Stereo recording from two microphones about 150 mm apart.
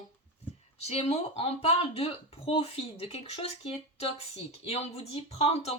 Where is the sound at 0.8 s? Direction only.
45° left (ahead or behind).